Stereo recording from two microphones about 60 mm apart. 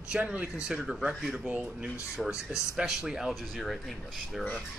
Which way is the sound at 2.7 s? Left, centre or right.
Centre.